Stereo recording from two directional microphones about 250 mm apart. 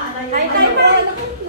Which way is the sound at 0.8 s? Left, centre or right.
Right.